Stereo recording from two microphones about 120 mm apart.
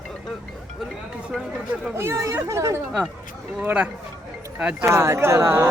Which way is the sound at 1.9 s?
20° right (ahead or behind).